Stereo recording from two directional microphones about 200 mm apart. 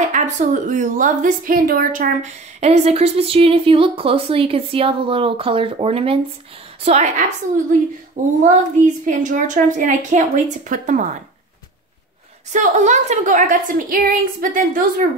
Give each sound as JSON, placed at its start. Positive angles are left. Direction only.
{"t": 0.1, "sound": "a woman's voice", "side_deg": -40}
{"t": 12.5, "sound": "a woman's voice", "side_deg": -40}